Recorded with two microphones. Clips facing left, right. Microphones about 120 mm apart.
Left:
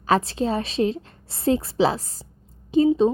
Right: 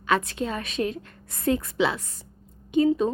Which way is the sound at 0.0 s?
35° left (ahead or behind).